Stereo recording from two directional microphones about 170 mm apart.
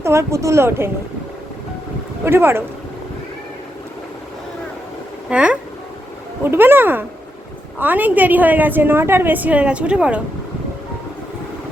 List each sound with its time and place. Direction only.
0.0 s a woman's voice: 15° right (ahead or behind)
2.2 s a woman's voice: 15° right (ahead or behind)
5.3 s a woman's voice: 5° right (ahead or behind)